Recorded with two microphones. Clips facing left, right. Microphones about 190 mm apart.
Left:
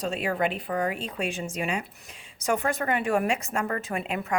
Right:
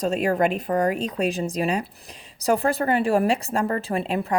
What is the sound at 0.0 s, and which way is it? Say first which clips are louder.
Speech: right 6 dB; 40° right (ahead or behind).